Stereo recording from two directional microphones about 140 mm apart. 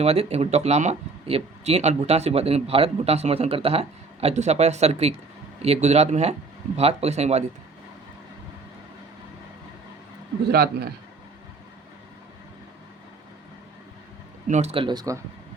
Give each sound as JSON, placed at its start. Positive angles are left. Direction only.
{"t": 0.0, "sound": "speech", "side_deg": -50}
{"t": 14.4, "sound": "speech", "side_deg": -60}
{"t": 14.7, "sound": "speech", "side_deg": -35}